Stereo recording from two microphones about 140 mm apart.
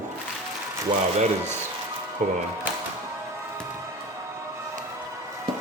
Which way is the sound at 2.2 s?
65° right (ahead or behind).